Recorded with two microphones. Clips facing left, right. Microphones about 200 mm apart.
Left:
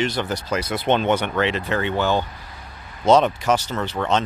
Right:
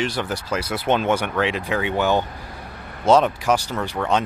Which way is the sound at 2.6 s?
60° right (ahead or behind).